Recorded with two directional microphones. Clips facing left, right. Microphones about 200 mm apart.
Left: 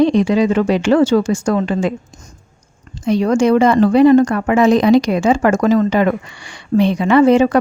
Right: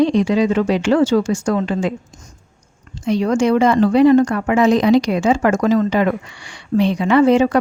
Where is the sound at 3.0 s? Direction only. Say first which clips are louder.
Left 2 dB; 45° left (ahead or behind).